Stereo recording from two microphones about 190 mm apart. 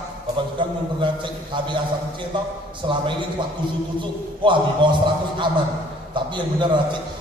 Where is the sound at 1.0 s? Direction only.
25° right (ahead or behind).